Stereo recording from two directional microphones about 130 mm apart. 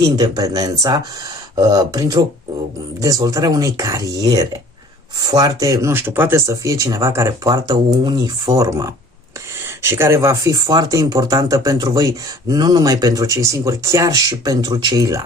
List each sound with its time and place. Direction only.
0.0 s speech: 30° right (ahead or behind)